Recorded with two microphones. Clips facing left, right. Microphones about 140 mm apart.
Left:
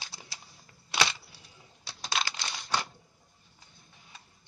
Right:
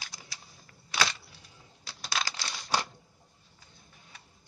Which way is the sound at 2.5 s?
35° right (ahead or behind).